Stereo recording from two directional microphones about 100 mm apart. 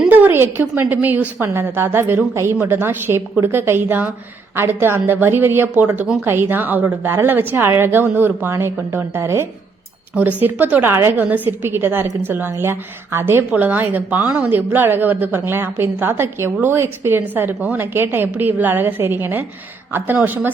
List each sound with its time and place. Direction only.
0.1 s a woman's voice: 20° right (ahead or behind)
10.2 s a woman's voice: 15° right (ahead or behind)